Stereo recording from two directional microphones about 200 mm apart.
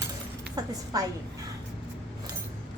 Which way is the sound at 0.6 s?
20° right (ahead or behind).